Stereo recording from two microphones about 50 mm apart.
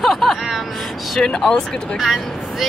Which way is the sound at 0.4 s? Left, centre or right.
Centre.